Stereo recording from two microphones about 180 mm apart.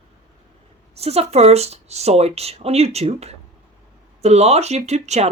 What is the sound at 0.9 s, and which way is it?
Speech, 35° right (ahead or behind).